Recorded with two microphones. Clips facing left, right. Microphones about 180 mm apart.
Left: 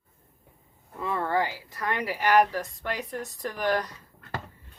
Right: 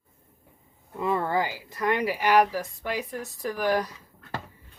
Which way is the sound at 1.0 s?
20° right (ahead or behind).